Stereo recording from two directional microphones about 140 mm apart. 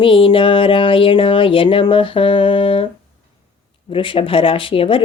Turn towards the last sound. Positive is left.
turn(degrees=40)  # may be behind; listen again after turning